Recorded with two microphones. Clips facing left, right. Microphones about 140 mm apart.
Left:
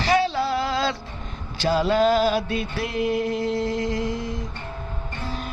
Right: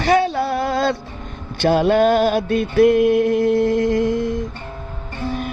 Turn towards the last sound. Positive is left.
turn(degrees=-55)  # may be behind; listen again after turning